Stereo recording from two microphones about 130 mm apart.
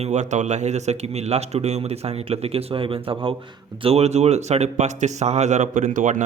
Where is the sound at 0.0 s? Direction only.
65° right (ahead or behind); by 3.3 s 45° right (ahead or behind).